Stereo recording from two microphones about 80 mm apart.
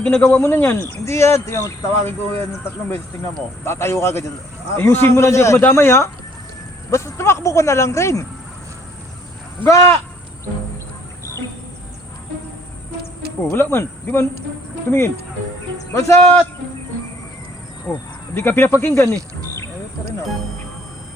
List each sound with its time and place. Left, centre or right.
0.0 s speech: centre
0.3 s speech: left
3.6 s speech: left
9.6 s speech: left
13.5 s speech: left
17.9 s speech: left